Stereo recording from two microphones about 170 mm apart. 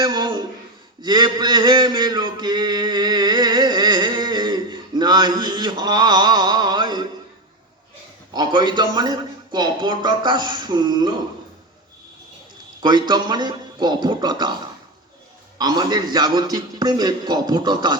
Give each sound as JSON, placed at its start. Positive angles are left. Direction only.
{"t": 0.0, "sound": "a sound", "side_deg": -25}
{"t": 1.0, "sound": "mantra", "side_deg": -25}
{"t": 8.3, "sound": "a man's voice", "side_deg": -25}
{"t": 12.8, "sound": "a man's voice", "side_deg": -25}